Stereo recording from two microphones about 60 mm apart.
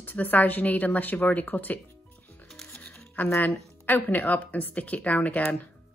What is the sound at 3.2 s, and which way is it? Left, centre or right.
Speech, left.